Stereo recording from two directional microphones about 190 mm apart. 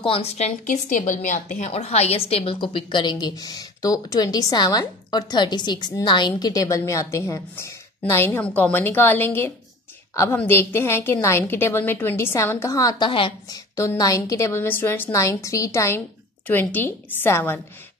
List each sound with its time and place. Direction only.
0.0 s a woman's voice: 30° left (ahead or behind); by 17.6 s 10° left (ahead or behind)